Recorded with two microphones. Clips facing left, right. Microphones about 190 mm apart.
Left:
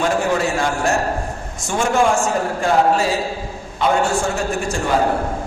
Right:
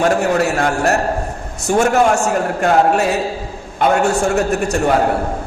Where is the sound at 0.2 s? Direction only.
65° right (ahead or behind).